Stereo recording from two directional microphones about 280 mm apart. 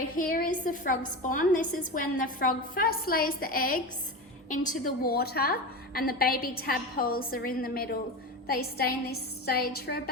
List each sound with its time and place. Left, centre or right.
0.2 s a woman's voice: left